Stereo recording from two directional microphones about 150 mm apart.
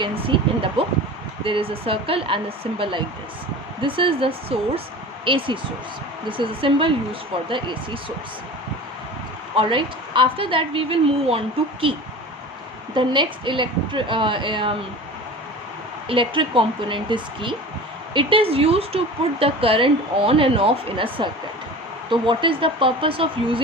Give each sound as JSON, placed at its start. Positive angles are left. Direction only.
{"t": 0.0, "sound": "speech", "side_deg": -35}
{"t": 9.6, "sound": "speech", "side_deg": -35}
{"t": 16.0, "sound": "speech", "side_deg": -35}